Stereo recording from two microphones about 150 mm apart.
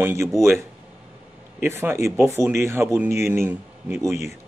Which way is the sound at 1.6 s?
15° right (ahead or behind).